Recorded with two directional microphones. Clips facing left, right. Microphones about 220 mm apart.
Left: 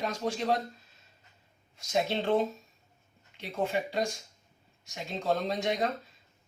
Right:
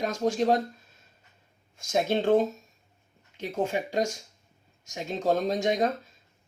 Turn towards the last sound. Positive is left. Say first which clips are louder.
# right 5 dB
turn(degrees=-45)  # may be behind; listen again after turning